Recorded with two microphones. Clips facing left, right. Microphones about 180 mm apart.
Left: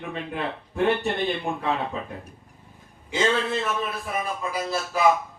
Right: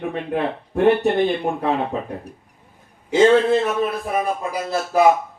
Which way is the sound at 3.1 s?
45° right (ahead or behind).